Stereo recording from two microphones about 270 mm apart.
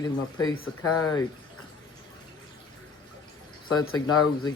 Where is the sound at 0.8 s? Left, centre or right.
Left.